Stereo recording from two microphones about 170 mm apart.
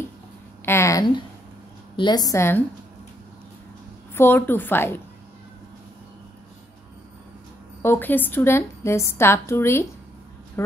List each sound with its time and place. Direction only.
0.7 s a woman's voice: 15° left (ahead or behind)
4.1 s a woman's voice: 10° left (ahead or behind)
7.8 s a woman's voice: 10° left (ahead or behind)